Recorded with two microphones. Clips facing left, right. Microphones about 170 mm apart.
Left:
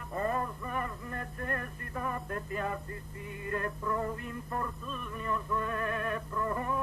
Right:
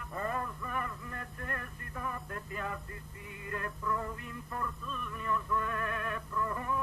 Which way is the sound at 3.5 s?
40° left (ahead or behind).